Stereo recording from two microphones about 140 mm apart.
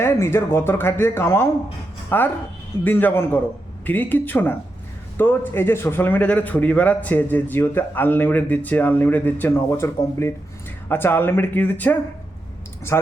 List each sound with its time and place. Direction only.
0.0 s a man's voice: 15° left (ahead or behind)